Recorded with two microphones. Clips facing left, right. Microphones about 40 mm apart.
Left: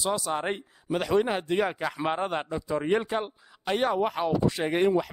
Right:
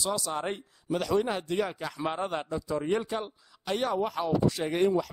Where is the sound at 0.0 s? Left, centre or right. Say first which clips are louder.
Left 3 dB; left.